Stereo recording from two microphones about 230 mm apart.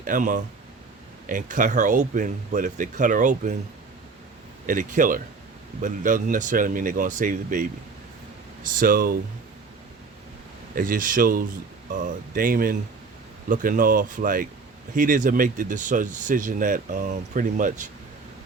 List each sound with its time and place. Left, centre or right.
0.0 s speech: right
4.6 s speech: right
8.7 s speech: right
10.8 s speech: right